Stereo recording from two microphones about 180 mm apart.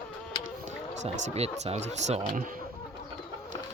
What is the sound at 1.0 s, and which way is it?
Speech, 40° right (ahead or behind).